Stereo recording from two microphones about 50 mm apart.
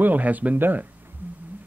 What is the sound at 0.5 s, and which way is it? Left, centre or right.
Speech, right.